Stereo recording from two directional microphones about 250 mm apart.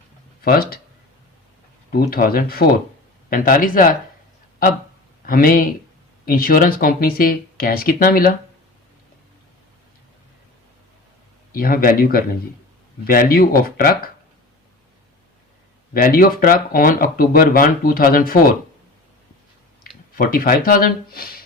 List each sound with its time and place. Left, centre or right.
0.4 s speech: left
1.9 s speech: left
5.2 s speech: left
11.5 s speech: left
16.0 s speech: left
20.1 s speech: left